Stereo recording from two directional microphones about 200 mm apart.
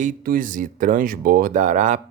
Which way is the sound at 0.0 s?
45° right (ahead or behind).